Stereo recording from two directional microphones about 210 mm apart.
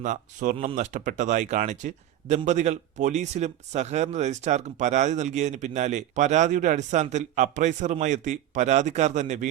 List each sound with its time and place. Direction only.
0.0 s speech: 35° right (ahead or behind)